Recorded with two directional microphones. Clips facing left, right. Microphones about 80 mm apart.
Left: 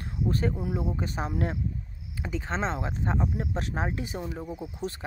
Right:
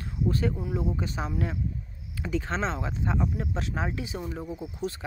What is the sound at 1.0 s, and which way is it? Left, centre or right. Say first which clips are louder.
Speech: left 1 dB; left.